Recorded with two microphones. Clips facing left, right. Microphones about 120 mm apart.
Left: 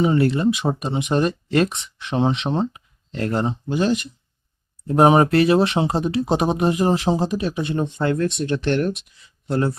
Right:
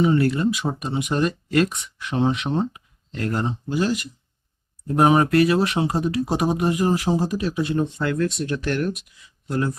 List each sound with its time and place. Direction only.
0.0 s speech: 20° left (ahead or behind)